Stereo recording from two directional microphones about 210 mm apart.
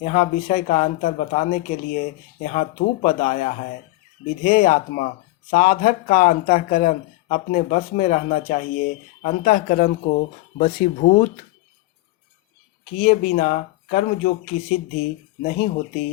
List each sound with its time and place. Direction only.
0.0 s speech: 35° left (ahead or behind)
13.0 s speech: 40° left (ahead or behind)